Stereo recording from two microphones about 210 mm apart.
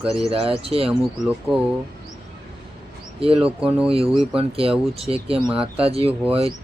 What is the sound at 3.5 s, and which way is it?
Speech, 5° right (ahead or behind).